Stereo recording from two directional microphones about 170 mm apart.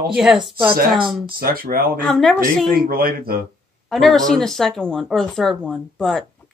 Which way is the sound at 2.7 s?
60° right (ahead or behind).